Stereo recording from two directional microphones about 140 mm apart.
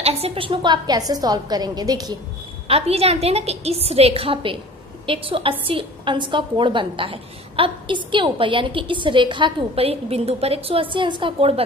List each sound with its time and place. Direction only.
0.0 s a woman's voice: 45° right (ahead or behind); by 2.1 s 30° right (ahead or behind)
2.7 s a woman's voice: 45° right (ahead or behind)